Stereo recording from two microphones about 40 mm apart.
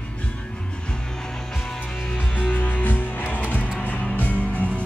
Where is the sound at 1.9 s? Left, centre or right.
Left.